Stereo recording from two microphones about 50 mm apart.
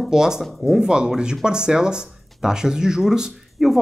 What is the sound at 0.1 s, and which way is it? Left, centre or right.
Speech, centre.